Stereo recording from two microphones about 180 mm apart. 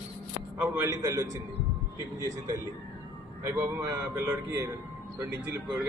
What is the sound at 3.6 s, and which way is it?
Speech, 15° right (ahead or behind).